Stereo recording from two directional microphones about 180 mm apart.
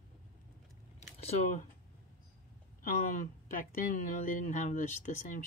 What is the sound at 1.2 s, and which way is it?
Speech, 45° left (ahead or behind).